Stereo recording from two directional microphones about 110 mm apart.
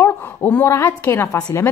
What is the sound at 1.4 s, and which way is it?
Speech, 35° left (ahead or behind).